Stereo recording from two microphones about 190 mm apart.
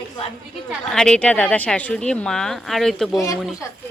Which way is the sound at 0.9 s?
5° left (ahead or behind).